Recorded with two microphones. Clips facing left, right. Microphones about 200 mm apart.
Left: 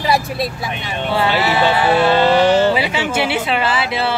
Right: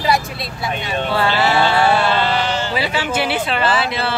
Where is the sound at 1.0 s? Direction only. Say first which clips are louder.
Left 1 dB; 15° left (ahead or behind).